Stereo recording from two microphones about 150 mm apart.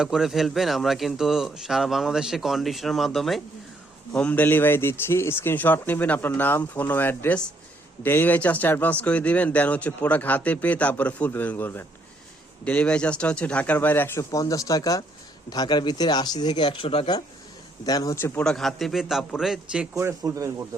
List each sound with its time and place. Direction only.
0.0 s speech: 5° right (ahead or behind); by 17.1 s 40° left (ahead or behind)
17.8 s speech: 25° left (ahead or behind)
18.4 s speech: centre (ahead or behind)
19.9 s speech: 20° right (ahead or behind)